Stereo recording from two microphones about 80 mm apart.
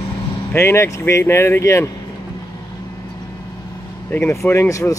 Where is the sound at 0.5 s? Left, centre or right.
Left.